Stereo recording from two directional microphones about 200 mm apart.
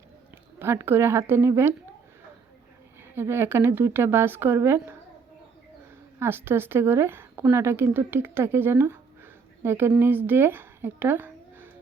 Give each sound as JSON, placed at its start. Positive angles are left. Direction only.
{"t": 0.6, "sound": "a woman's voice", "side_deg": -10}
{"t": 3.2, "sound": "a woman's voice", "side_deg": -10}
{"t": 6.1, "sound": "a woman's voice", "side_deg": -10}